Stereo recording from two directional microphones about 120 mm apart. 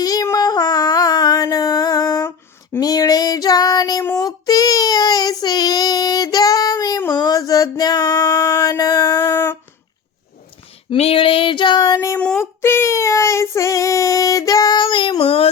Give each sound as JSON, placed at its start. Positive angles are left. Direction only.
{"t": 0.0, "sound": "a sound", "side_deg": 30}
{"t": 2.8, "sound": "child singing", "side_deg": 30}
{"t": 7.1, "sound": "a sound", "side_deg": 35}
{"t": 10.8, "sound": "female singing", "side_deg": 55}
{"t": 11.9, "sound": "speech", "side_deg": 25}
{"t": 12.4, "sound": "child singing", "side_deg": 20}